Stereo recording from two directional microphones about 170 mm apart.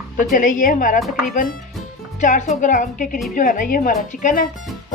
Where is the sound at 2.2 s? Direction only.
45° left (ahead or behind).